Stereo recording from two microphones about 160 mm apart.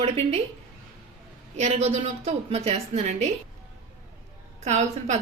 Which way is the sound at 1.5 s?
45° right (ahead or behind).